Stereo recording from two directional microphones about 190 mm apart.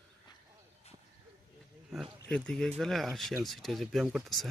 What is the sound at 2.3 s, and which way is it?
Speech, 5° left (ahead or behind).